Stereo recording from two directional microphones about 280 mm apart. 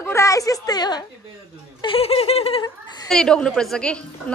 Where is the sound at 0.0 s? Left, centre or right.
Centre.